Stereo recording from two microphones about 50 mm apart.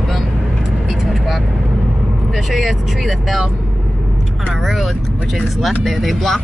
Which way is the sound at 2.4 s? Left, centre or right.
Centre.